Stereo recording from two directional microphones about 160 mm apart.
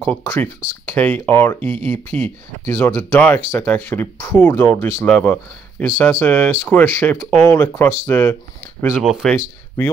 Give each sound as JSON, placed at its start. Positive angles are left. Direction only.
{"t": 0.0, "sound": "speech", "side_deg": 10}
{"t": 8.9, "sound": "speech", "side_deg": -5}
{"t": 9.3, "sound": "speech", "side_deg": 15}